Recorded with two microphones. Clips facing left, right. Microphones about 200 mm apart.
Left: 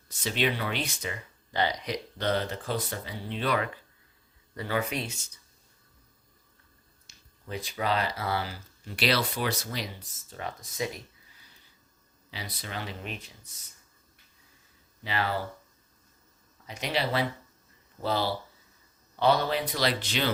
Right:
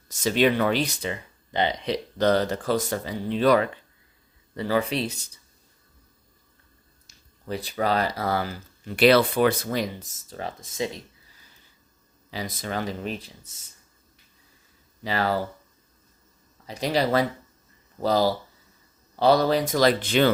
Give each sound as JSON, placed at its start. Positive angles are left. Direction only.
{"t": 0.1, "sound": "speech", "side_deg": -45}
{"t": 1.5, "sound": "speech", "side_deg": -20}
{"t": 2.1, "sound": "speech", "side_deg": -40}
{"t": 7.4, "sound": "speech", "side_deg": -35}
{"t": 9.0, "sound": "speech", "side_deg": -55}
{"t": 12.3, "sound": "speech", "side_deg": -45}
{"t": 15.0, "sound": "speech", "side_deg": -40}
{"t": 16.6, "sound": "speech", "side_deg": -35}